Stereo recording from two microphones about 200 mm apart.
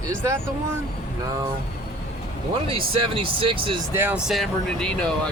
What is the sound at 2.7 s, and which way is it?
Speech, 25° right (ahead or behind).